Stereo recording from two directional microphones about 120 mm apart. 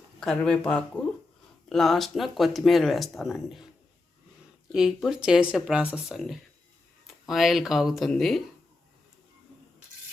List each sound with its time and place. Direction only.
0.2 s speech: 5° left (ahead or behind)
4.7 s speech: 5° right (ahead or behind)